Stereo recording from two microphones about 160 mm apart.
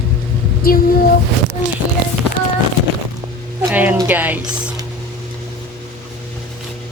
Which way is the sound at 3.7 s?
10° right (ahead or behind).